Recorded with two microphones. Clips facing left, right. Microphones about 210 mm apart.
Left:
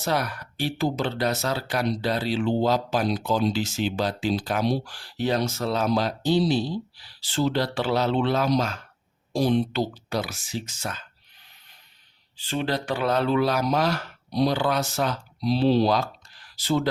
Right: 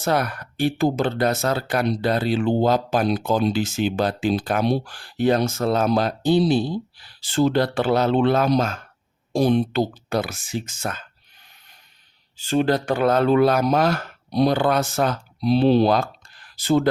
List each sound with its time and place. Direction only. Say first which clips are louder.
0.0 s speech: right 4 dB; 55° right (ahead or behind)
12.4 s speech: right 7 dB; 45° right (ahead or behind)